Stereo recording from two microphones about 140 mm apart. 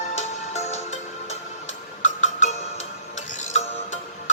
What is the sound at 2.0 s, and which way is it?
Music, 60° left (ahead or behind).